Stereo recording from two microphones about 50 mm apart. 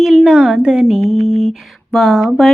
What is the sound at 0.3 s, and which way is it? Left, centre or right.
Speech, centre.